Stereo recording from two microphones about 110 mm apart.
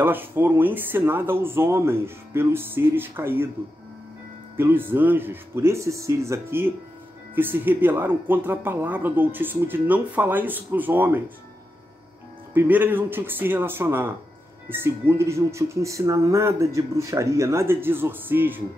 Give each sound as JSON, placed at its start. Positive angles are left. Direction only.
{"t": 0.0, "sound": "speech", "side_deg": -20}
{"t": 4.6, "sound": "speech", "side_deg": -20}
{"t": 12.5, "sound": "speech", "side_deg": -15}